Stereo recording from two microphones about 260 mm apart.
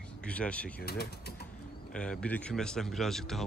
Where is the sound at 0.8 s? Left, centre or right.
Left.